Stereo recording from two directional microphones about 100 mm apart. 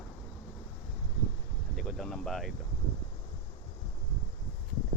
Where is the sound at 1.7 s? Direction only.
Centre (ahead or behind).